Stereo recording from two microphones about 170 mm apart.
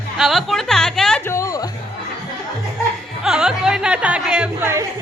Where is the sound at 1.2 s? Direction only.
15° left (ahead or behind).